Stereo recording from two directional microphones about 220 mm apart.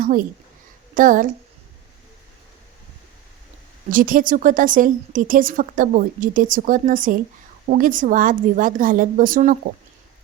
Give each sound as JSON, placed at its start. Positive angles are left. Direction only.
{"t": 0.0, "sound": "a woman's voice", "side_deg": -40}
{"t": 3.8, "sound": "a woman's voice", "side_deg": -40}